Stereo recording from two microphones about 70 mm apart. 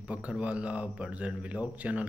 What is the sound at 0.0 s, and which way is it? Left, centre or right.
Speech, centre.